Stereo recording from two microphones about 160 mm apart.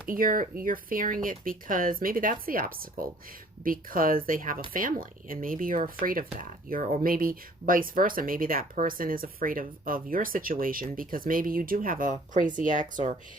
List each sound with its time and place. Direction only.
0.1 s speech: 60° right (ahead or behind)